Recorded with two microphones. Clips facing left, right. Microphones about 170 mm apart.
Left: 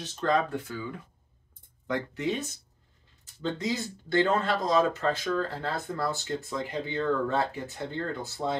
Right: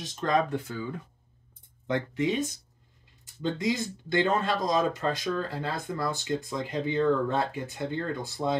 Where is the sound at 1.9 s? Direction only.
20° right (ahead or behind).